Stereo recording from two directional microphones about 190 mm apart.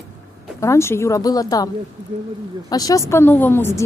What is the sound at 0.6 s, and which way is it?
Speech, 15° left (ahead or behind).